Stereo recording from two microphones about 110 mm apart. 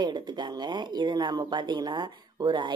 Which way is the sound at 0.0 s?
40° right (ahead or behind).